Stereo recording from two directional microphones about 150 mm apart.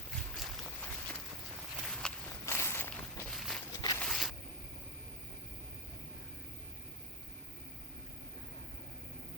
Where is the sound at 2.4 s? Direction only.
15° left (ahead or behind).